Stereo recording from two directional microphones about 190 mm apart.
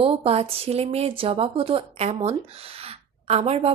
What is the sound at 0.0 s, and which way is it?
Speech, 30° right (ahead or behind).